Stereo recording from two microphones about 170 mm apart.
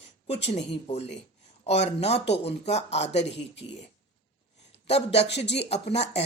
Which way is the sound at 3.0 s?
90° left.